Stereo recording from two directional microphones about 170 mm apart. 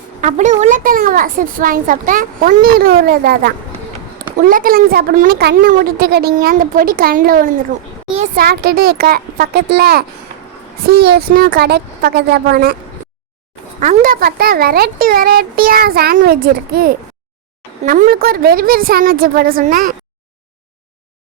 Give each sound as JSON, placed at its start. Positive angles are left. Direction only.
{"t": 0.2, "sound": "speech", "side_deg": -45}
{"t": 5.4, "sound": "speech", "side_deg": -75}
{"t": 13.7, "sound": "speech", "side_deg": -50}